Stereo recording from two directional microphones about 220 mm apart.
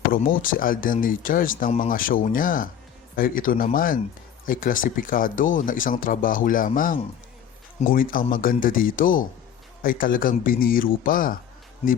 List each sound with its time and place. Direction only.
0.1 s speech: 40° left (ahead or behind)